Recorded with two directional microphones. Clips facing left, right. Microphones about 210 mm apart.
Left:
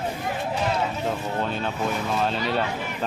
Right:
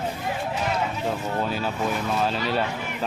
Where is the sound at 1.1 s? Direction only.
5° right (ahead or behind).